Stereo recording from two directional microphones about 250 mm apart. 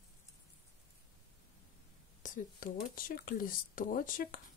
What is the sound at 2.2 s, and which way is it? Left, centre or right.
Speech, left.